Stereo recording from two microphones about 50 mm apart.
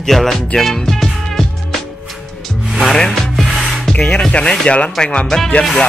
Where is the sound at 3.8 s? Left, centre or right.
Centre.